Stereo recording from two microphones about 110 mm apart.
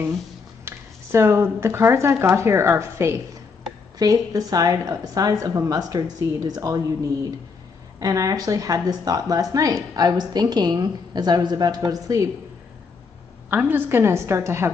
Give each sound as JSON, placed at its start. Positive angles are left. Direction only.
{"t": 0.7, "sound": "speech", "side_deg": -25}
{"t": 8.0, "sound": "speech", "side_deg": -30}
{"t": 13.5, "sound": "speech", "side_deg": -20}